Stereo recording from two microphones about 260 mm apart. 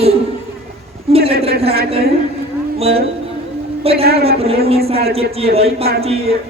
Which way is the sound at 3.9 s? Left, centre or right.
Right.